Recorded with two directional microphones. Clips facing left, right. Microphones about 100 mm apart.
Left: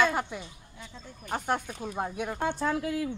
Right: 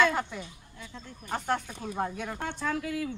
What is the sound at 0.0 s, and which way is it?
Speech, 15° left (ahead or behind).